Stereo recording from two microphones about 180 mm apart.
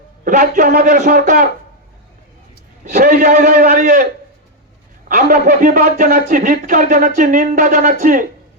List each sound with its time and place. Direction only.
0.3 s a man's voice: 50° right (ahead or behind)
2.9 s a man's voice: 55° right (ahead or behind)
5.0 s a man's voice: 50° right (ahead or behind)